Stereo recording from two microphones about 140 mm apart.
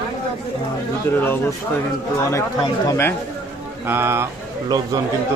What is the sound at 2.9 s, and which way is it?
Speech, 15° left (ahead or behind).